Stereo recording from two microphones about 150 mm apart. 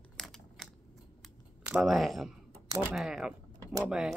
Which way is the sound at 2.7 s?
20° right (ahead or behind).